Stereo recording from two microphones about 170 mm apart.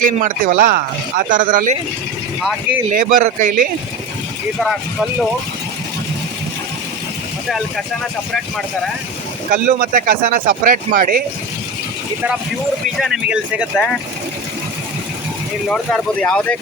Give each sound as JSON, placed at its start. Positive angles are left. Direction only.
{"t": 0.2, "sound": "speech", "side_deg": -50}
{"t": 2.4, "sound": "speech", "side_deg": 0}
{"t": 2.9, "sound": "speech", "side_deg": -50}
{"t": 9.5, "sound": "speech", "side_deg": -50}
{"t": 13.0, "sound": "speech", "side_deg": -5}
{"t": 15.7, "sound": "speech", "side_deg": 5}